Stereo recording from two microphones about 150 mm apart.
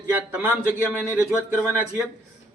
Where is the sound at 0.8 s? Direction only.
10° left (ahead or behind).